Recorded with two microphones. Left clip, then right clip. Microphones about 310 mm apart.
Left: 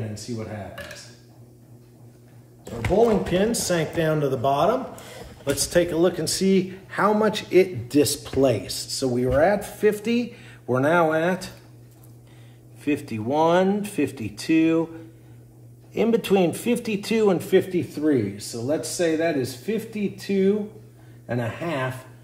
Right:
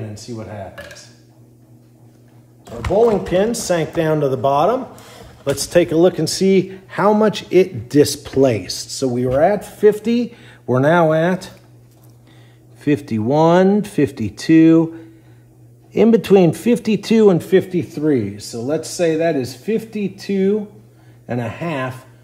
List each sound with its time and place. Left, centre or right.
3.3 s speech: right
12.8 s speech: right
15.9 s a man's voice: right